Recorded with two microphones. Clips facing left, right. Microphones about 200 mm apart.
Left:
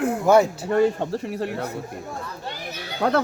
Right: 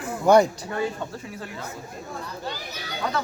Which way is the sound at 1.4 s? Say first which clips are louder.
Left 9 dB; 65° left (ahead or behind).